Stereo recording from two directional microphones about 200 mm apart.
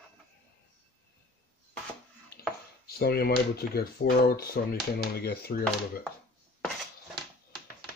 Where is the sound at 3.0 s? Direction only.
50° left (ahead or behind).